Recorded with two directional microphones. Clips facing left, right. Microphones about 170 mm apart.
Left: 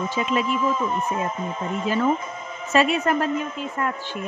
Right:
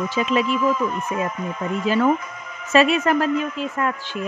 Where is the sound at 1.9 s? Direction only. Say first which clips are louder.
Right 3 dB; 90° right.